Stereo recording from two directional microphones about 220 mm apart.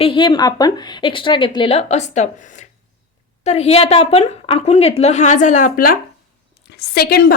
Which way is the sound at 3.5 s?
30° left (ahead or behind).